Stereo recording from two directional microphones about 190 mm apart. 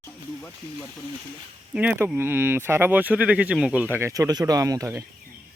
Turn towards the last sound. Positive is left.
turn(degrees=-15)  # may be behind; listen again after turning